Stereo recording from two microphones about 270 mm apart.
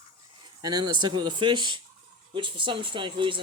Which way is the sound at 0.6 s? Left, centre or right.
Centre.